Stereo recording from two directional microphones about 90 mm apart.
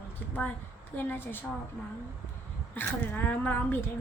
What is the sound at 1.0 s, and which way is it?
Speech, 25° left (ahead or behind).